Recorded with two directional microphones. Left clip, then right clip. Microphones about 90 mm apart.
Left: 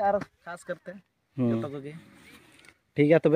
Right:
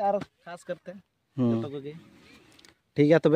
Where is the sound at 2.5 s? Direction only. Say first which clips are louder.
Right 1 dB; 40° right (ahead or behind).